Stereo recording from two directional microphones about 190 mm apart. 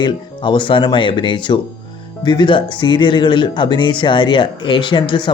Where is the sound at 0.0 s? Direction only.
25° left (ahead or behind).